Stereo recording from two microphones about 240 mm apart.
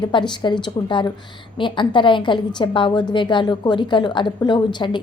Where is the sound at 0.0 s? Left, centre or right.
Centre.